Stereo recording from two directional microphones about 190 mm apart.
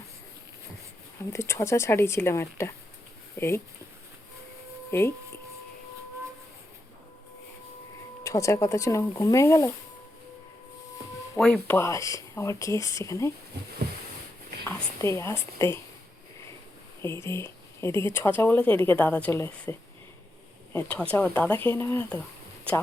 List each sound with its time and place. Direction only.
1.3 s speech: 15° left (ahead or behind)
4.9 s speech: 15° left (ahead or behind)
8.2 s speech: 15° left (ahead or behind)
11.3 s speech: 5° left (ahead or behind)
11.8 s speech: 15° left (ahead or behind)
14.7 s a woman's voice: 15° left (ahead or behind)
17.2 s speech: 15° left (ahead or behind)
20.7 s speech: 5° left (ahead or behind)